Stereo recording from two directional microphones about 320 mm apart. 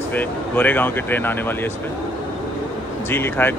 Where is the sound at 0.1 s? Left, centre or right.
Centre.